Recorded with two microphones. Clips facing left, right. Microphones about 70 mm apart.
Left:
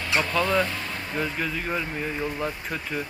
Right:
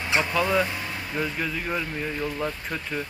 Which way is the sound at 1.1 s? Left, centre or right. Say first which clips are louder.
Even; centre.